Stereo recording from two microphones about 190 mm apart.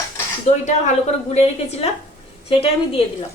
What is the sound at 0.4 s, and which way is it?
A woman's voice, 35° left (ahead or behind).